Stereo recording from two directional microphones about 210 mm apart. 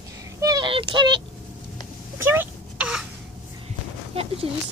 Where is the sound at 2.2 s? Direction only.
10° right (ahead or behind).